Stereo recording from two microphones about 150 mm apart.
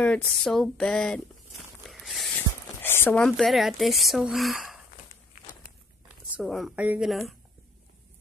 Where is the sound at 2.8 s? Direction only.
15° left (ahead or behind); by 4.8 s centre (ahead or behind).